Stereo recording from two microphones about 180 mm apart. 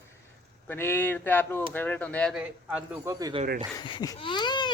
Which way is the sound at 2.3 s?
5° right (ahead or behind).